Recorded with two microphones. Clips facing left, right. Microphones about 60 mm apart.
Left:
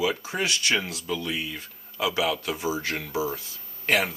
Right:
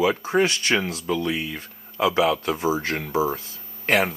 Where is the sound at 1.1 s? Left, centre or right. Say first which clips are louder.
Right 5 dB; centre.